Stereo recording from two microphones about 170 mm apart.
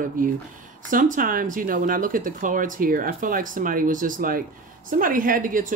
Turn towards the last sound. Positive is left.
turn(degrees=-55)  # may be behind; listen again after turning